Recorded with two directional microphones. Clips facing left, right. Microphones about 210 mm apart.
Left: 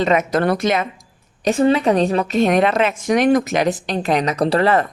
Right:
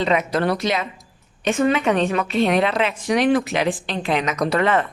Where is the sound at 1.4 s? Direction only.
35° left (ahead or behind).